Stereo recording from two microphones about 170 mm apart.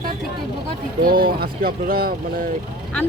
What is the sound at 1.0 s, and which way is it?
Speech, 60° right (ahead or behind).